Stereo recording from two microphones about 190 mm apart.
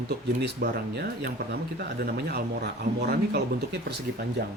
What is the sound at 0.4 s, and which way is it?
Speech, 60° right (ahead or behind).